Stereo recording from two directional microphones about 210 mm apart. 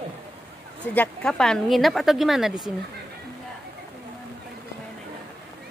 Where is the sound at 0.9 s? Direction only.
5° left (ahead or behind).